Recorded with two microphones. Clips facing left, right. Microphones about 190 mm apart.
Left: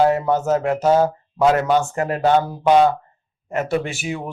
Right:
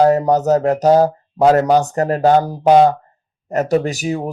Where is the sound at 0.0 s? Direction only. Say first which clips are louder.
Right 4 dB; 40° right (ahead or behind).